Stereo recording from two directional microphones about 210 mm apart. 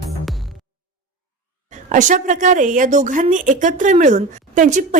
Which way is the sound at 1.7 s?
35° right (ahead or behind).